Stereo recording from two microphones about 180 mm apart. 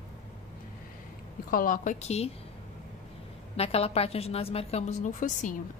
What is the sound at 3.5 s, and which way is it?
A woman's voice, 35° left (ahead or behind).